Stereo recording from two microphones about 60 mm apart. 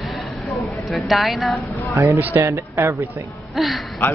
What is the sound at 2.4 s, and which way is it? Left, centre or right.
Speech, right.